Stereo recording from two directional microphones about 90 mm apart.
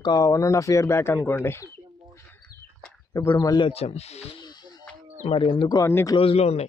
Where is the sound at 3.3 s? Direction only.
45° left (ahead or behind).